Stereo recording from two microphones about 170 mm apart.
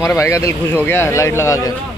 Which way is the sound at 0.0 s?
15° left (ahead or behind).